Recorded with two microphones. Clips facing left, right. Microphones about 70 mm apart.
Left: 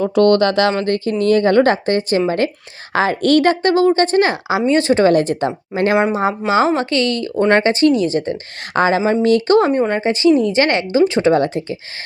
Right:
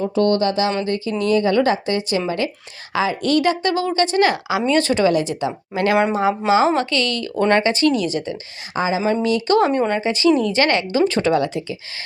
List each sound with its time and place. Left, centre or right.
0.0 s speech: left
0.8 s speech: left
5.0 s speech: left
5.7 s speech: left
8.7 s speech: left
9.5 s a woman's voice: left
11.3 s speech: left